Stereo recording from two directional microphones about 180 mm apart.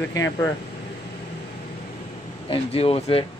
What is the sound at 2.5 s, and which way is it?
Speech, 35° left (ahead or behind).